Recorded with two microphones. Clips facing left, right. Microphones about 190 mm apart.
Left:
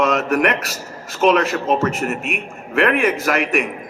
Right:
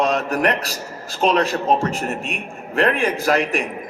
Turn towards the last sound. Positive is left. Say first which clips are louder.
# even
turn(degrees=-35)  # may be behind; listen again after turning